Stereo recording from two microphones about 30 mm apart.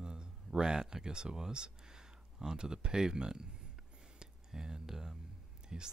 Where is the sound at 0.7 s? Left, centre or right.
Centre.